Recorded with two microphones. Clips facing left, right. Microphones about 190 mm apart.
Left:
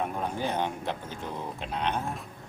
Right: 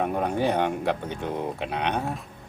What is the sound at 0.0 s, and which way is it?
Speech, 60° right (ahead or behind).